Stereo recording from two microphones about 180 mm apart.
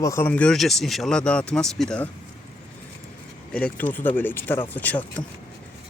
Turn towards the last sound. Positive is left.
turn(degrees=10)  # may be behind; listen again after turning